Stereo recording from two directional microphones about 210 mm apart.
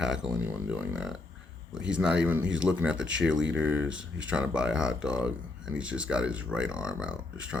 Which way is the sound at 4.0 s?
65° right (ahead or behind).